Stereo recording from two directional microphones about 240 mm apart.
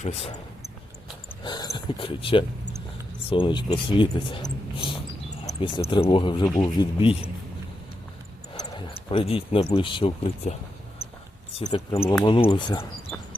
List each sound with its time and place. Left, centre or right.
1.5 s speech: centre
8.5 s speech: left
11.5 s speech: left